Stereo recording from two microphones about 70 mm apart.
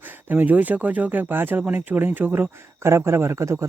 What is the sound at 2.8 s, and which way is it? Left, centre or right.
Speech, right.